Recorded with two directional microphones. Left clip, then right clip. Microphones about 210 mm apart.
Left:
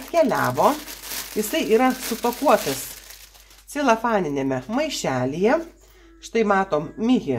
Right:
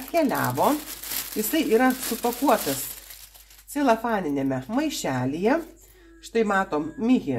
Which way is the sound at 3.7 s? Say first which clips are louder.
Left 3 dB; 40° left (ahead or behind).